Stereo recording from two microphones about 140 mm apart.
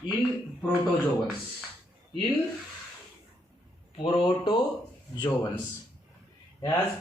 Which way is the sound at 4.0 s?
40° left (ahead or behind).